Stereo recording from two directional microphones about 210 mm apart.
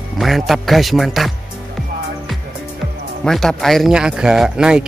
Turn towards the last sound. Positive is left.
turn(degrees=-5)  # may be behind; listen again after turning